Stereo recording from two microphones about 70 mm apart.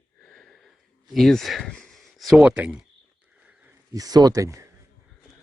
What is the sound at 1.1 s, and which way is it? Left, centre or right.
Speech, centre.